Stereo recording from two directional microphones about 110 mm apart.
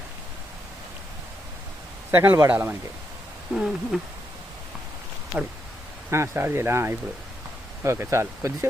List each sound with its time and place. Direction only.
2.0 s speech: 20° right (ahead or behind)
3.5 s owl: 5° right (ahead or behind)
6.1 s speech: 25° right (ahead or behind)